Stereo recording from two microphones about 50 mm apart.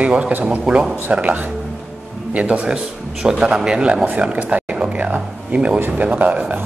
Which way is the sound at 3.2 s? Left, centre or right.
Centre.